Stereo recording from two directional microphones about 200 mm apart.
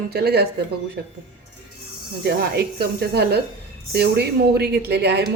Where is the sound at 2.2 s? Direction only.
55° right (ahead or behind).